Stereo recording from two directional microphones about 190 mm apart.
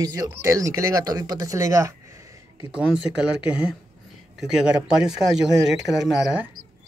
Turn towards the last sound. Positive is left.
turn(degrees=-5)  # may be behind; listen again after turning